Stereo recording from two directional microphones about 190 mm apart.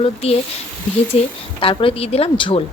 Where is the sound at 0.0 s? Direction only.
35° left (ahead or behind).